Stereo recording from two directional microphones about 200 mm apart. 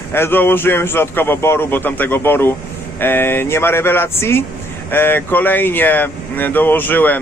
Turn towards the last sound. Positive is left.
turn(degrees=10)  # may be behind; listen again after turning